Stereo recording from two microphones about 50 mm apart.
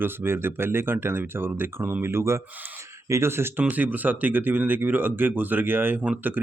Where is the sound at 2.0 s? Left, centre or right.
Right.